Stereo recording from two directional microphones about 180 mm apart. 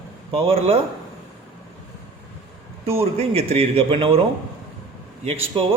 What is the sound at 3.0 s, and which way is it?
Speech, 35° right (ahead or behind).